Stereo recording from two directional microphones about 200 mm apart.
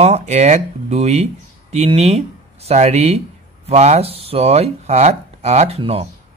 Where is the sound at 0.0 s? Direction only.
35° right (ahead or behind).